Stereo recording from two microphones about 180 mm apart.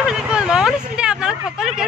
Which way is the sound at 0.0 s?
5° right (ahead or behind).